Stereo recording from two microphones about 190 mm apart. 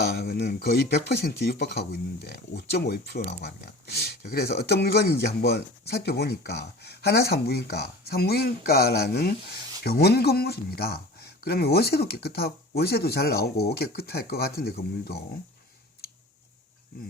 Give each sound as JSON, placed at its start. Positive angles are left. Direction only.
{"t": 0.0, "sound": "speech", "side_deg": 55}